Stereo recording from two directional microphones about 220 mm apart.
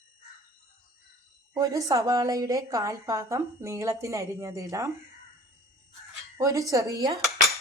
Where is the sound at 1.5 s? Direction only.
15° right (ahead or behind).